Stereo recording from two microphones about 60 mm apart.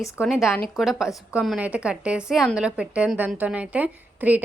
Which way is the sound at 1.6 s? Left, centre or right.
Centre.